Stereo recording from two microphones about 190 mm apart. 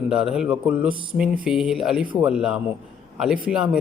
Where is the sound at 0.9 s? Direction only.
25° right (ahead or behind).